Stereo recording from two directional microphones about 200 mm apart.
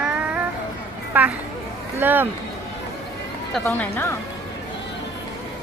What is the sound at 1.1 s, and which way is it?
Speech, 10° right (ahead or behind).